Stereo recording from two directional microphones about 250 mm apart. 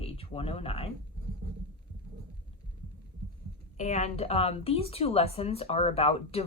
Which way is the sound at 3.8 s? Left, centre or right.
Left.